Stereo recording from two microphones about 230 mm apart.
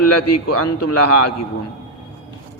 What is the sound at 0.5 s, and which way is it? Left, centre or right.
Speech, left.